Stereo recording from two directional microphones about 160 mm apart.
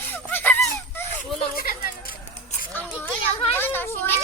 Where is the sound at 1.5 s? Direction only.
65° left (ahead or behind).